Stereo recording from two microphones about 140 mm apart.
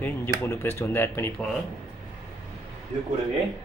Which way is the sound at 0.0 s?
15° left (ahead or behind).